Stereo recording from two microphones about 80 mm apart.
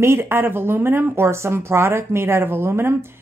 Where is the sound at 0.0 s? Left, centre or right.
Right.